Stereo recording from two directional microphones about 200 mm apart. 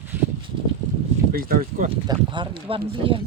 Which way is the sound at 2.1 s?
25° right (ahead or behind).